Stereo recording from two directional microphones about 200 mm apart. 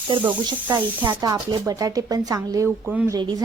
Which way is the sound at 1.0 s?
15° right (ahead or behind).